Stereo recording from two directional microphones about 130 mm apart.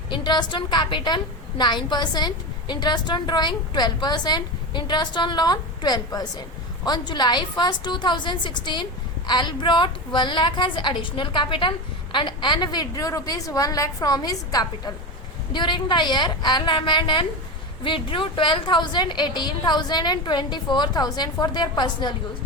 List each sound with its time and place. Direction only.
0.1 s a woman's voice: 35° left (ahead or behind)